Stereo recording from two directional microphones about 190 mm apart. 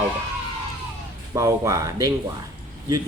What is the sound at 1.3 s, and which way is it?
Speech, 15° right (ahead or behind).